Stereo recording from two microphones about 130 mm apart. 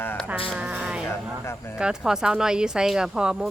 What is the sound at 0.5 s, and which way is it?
Music, 5° right (ahead or behind).